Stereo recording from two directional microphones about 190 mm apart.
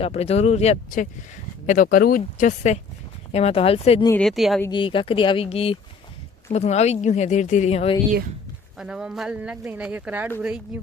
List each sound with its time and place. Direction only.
0.0 s speech: 35° left (ahead or behind)
4.2 s speech: centre (ahead or behind)
4.7 s speech: 25° left (ahead or behind)
8.8 s speech: 5° right (ahead or behind)